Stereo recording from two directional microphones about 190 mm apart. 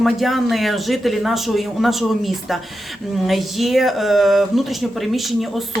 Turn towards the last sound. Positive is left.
turn(degrees=0)  # may be behind; listen again after turning